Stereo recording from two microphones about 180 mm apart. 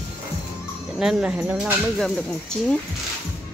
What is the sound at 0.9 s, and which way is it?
Speech, 5° right (ahead or behind).